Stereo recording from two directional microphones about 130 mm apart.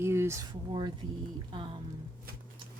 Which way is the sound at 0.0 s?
20° right (ahead or behind).